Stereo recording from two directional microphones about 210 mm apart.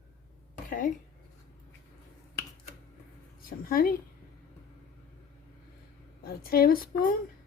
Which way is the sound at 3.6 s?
45° left (ahead or behind).